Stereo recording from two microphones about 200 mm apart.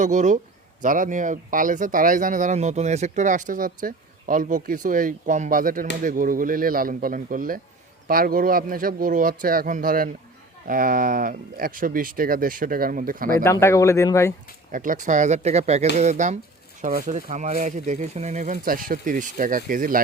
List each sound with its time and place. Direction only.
0.0 s speech: 40° right (ahead or behind)
13.4 s speech: 15° left (ahead or behind)
14.7 s speech: 40° right (ahead or behind)
18.5 s speech: 45° right (ahead or behind)